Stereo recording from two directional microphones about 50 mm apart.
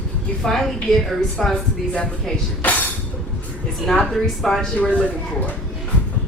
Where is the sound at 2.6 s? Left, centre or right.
Left.